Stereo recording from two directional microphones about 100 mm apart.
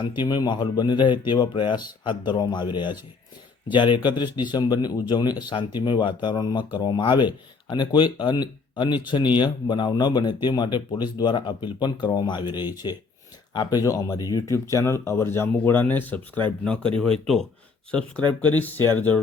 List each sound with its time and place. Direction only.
0.0 s speech: 50° left (ahead or behind); by 17.4 s 5° left (ahead or behind)
18.5 s speech: 20° left (ahead or behind)